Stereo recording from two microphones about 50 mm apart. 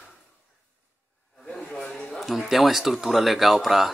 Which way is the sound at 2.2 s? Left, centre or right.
Centre.